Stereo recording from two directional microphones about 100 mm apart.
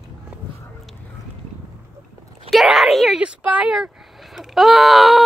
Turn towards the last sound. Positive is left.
turn(degrees=0)  # may be behind; listen again after turning